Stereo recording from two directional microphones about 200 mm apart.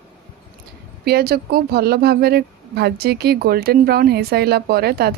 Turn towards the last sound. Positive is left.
turn(degrees=-55)  # may be behind; listen again after turning